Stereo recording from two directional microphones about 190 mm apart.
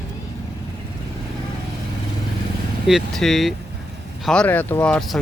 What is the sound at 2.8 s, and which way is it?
Speech, centre (ahead or behind).